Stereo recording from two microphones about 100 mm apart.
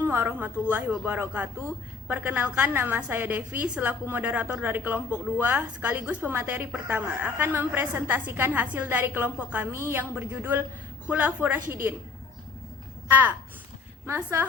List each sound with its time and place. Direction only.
0.0 s a woman's voice: 20° right (ahead or behind)
13.1 s speech: 15° right (ahead or behind)